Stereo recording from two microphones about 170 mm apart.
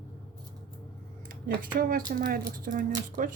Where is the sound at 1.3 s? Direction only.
55° right (ahead or behind).